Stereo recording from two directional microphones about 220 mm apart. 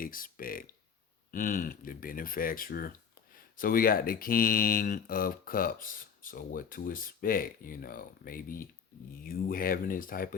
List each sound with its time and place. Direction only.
0.0 s speech: 40° left (ahead or behind)